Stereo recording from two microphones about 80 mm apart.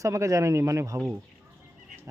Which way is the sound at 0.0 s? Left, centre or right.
Right.